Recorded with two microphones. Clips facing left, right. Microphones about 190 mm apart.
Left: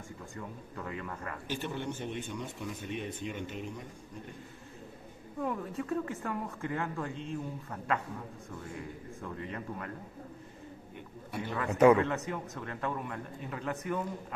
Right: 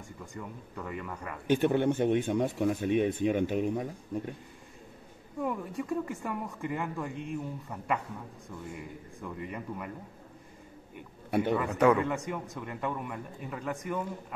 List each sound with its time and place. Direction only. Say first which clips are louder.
0.7 s speech: right 2 dB; 5° right (ahead or behind)
1.5 s speech: right 12 dB; 60° right (ahead or behind)
5.4 s speech: right 2 dB; 10° right (ahead or behind)
11.2 s a man's voice: right 11 dB; 60° right (ahead or behind)
12.0 s speech: even; 10° right (ahead or behind)